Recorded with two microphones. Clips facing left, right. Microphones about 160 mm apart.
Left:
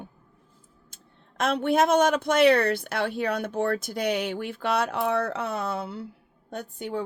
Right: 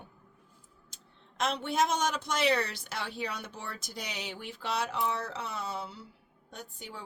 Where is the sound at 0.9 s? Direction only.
55° left (ahead or behind).